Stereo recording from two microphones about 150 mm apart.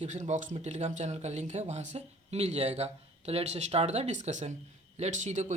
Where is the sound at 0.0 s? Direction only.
50° right (ahead or behind).